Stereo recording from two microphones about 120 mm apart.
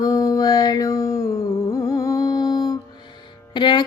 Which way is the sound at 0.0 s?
30° left (ahead or behind).